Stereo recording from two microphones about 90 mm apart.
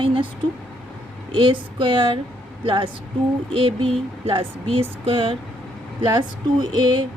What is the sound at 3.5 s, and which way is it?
A woman's voice, 80° right.